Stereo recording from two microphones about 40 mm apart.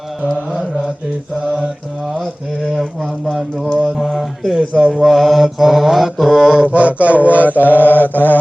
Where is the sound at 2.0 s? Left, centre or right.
Centre.